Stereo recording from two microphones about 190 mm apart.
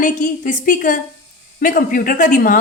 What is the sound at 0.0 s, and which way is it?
A woman's voice, 45° left (ahead or behind).